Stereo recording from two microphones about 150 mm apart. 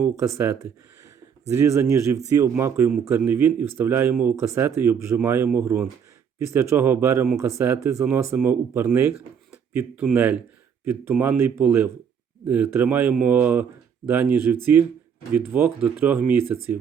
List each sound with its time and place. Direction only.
0.0 s a man's voice: 20° right (ahead or behind)